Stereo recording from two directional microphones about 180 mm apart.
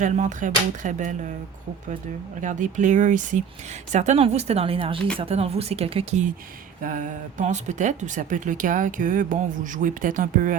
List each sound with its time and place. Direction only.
0.0 s speech: 45° right (ahead or behind)
2.4 s speech: 45° right (ahead or behind)
6.8 s speech: 45° right (ahead or behind)